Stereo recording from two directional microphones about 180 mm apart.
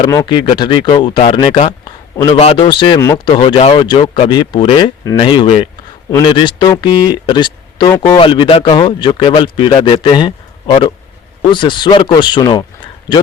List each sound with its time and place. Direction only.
0.0 s speech: 20° left (ahead or behind)